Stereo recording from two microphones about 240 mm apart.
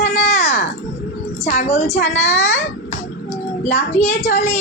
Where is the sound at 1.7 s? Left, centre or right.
Left.